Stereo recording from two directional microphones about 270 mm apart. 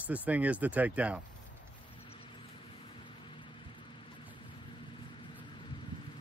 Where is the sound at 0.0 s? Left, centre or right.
Centre.